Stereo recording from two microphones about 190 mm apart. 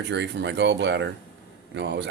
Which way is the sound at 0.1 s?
65° right (ahead or behind).